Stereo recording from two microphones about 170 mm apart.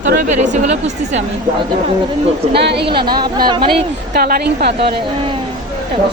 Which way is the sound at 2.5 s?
75° right (ahead or behind).